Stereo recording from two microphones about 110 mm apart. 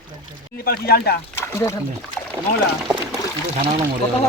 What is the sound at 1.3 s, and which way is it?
Speech, 25° left (ahead or behind).